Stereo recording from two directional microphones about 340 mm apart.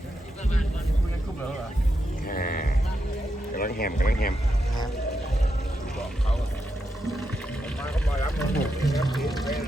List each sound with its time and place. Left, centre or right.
2.2 s livestock: left
3.5 s speech: left
8.4 s speech: centre